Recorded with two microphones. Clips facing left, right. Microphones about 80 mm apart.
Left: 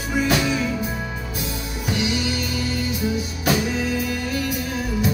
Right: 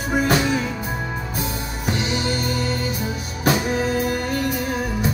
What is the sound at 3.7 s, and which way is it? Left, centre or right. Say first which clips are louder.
Music: right 3 dB; right.